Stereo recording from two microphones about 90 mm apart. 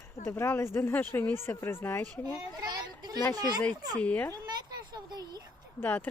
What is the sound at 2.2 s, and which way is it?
A child's voice, 45° right (ahead or behind).